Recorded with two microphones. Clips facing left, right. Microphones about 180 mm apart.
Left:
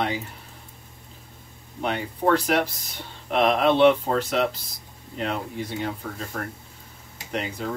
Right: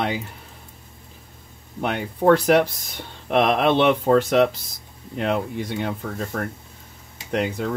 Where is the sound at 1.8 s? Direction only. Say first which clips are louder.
Right 4 dB; 55° right (ahead or behind).